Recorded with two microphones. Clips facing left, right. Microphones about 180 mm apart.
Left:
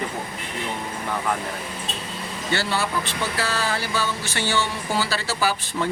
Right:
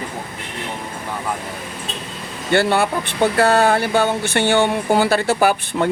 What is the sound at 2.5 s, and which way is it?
Speech, 55° right (ahead or behind).